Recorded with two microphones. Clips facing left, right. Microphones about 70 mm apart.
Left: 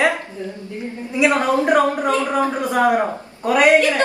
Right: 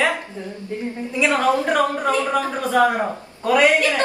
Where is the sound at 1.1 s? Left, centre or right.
Left.